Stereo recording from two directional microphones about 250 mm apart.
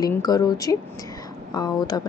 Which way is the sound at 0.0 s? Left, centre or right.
Centre.